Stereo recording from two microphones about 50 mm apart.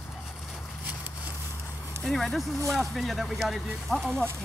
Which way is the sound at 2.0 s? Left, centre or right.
Centre.